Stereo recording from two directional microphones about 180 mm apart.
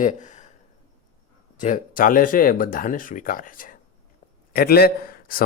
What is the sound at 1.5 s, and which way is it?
A man's voice, 45° left (ahead or behind).